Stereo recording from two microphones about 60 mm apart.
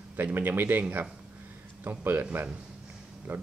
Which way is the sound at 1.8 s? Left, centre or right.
Right.